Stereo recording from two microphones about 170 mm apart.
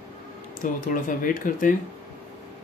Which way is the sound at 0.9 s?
55° left (ahead or behind).